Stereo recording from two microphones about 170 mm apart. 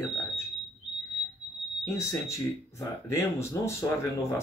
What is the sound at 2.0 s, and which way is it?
Speech, 15° left (ahead or behind).